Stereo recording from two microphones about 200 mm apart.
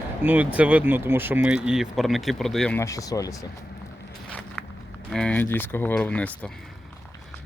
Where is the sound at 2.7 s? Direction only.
15° left (ahead or behind).